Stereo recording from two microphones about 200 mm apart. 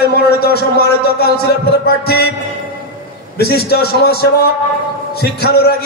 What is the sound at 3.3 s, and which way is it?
A man's voice, 55° left (ahead or behind).